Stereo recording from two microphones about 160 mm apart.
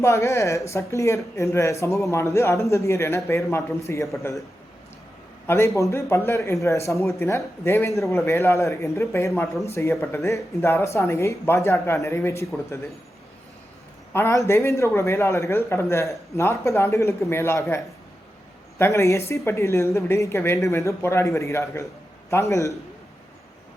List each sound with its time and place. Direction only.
0.0 s a man's voice: 20° left (ahead or behind)
5.5 s a man's voice: 20° left (ahead or behind)
14.1 s a man's voice: 15° left (ahead or behind)